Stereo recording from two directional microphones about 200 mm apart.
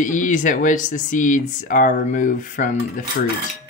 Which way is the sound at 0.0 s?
40° left (ahead or behind).